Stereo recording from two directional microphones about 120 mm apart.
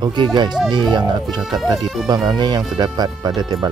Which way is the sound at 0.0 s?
40° right (ahead or behind).